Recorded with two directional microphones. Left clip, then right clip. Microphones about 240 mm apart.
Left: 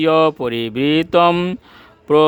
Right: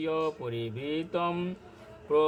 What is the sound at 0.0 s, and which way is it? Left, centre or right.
Mantra, left.